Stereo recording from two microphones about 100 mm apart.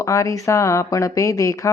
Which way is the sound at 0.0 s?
30° left (ahead or behind).